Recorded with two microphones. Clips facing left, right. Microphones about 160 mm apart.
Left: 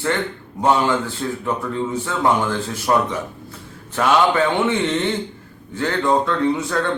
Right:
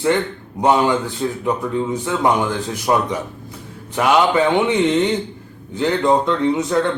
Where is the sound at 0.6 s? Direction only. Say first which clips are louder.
Right 2 dB; 15° right (ahead or behind).